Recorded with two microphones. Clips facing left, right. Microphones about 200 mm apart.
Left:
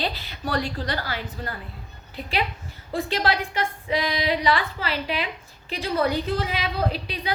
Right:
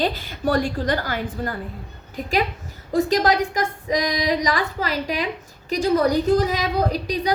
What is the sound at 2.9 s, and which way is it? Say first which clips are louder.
A woman's voice: right 6 dB; 40° right (ahead or behind).